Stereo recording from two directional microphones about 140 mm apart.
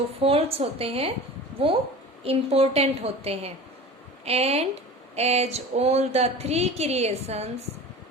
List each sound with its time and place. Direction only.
0.2 s speech: 45° right (ahead or behind)